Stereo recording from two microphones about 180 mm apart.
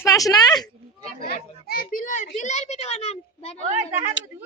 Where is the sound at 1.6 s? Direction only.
55° left (ahead or behind); by 3.7 s 35° left (ahead or behind).